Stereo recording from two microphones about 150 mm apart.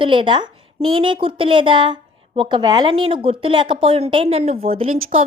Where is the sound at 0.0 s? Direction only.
35° right (ahead or behind).